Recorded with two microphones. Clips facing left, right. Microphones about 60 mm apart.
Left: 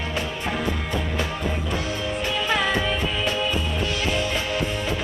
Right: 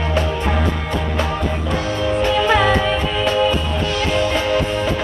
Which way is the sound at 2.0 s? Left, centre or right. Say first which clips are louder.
Right 9 dB; right.